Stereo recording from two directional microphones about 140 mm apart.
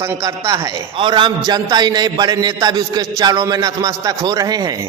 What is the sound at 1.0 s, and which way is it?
A man's voice, 35° right (ahead or behind).